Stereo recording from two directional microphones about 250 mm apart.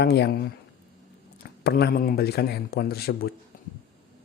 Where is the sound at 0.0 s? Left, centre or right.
Left.